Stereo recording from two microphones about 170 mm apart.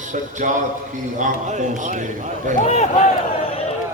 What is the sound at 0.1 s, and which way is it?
A man's voice, 50° right (ahead or behind).